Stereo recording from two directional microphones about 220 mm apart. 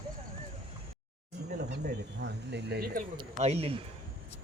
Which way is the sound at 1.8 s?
50° right (ahead or behind).